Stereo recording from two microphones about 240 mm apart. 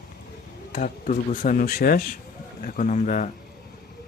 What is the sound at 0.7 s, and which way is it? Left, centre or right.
Speech, left.